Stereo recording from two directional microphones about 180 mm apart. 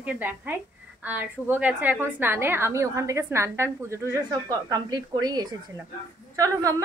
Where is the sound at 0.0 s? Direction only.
10° right (ahead or behind).